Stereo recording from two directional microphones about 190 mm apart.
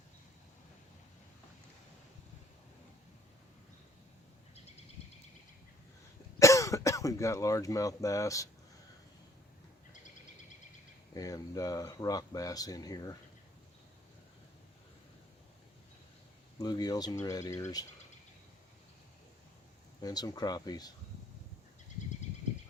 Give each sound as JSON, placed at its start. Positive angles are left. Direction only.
{"t": 6.4, "sound": "speech", "side_deg": 15}
{"t": 9.9, "sound": "bird", "side_deg": 40}
{"t": 11.1, "sound": "speech", "side_deg": 20}
{"t": 16.6, "sound": "speech", "side_deg": 20}
{"t": 20.0, "sound": "speech", "side_deg": 20}